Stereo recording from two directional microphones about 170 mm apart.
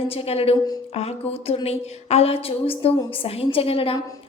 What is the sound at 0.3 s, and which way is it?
A woman's voice, 35° left (ahead or behind).